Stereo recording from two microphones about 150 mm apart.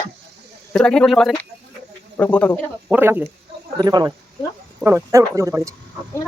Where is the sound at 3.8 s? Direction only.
25° right (ahead or behind).